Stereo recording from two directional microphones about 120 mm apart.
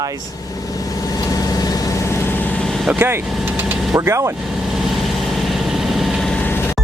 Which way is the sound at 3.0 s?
15° right (ahead or behind).